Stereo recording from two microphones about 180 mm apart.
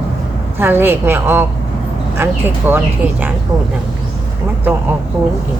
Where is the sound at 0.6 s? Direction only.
10° right (ahead or behind).